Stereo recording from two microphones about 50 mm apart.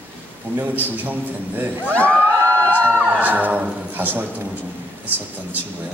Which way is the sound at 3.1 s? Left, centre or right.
Right.